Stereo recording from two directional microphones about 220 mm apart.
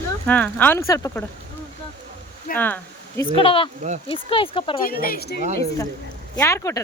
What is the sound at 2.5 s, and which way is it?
Speech, 10° left (ahead or behind).